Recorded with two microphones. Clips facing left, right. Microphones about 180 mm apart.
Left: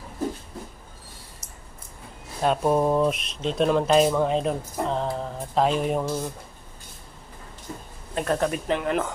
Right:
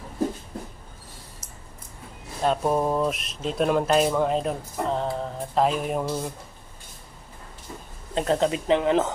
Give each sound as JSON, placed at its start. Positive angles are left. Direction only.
{"t": 2.4, "sound": "speech", "side_deg": 0}
{"t": 8.1, "sound": "speech", "side_deg": -20}